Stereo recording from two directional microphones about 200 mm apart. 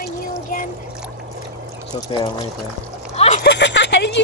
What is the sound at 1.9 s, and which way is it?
Pour, 25° left (ahead or behind).